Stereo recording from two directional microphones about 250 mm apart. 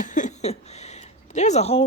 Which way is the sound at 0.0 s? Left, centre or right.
Left.